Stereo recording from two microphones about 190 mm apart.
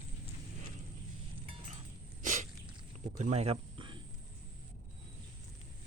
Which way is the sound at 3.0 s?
40° right (ahead or behind).